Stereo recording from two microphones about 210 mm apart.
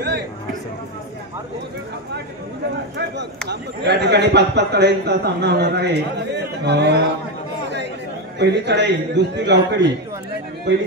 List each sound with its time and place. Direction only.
0.0 s a sound: 50° right (ahead or behind)
3.0 s speech: 55° right (ahead or behind)
8.4 s speech: 55° right (ahead or behind)